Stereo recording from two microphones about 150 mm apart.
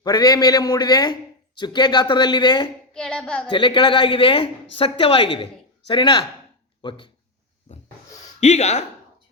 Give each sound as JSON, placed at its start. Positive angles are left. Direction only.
{"t": 0.0, "sound": "a man's voice", "side_deg": 25}
{"t": 2.9, "sound": "child singing", "side_deg": 5}
{"t": 3.5, "sound": "a woman's voice", "side_deg": 35}
{"t": 8.4, "sound": "speech", "side_deg": 50}